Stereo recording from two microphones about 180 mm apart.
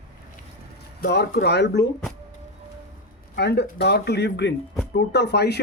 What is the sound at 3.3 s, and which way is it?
Speech, 65° left (ahead or behind).